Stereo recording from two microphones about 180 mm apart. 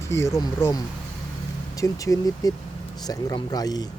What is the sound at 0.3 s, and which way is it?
Speech, 20° left (ahead or behind).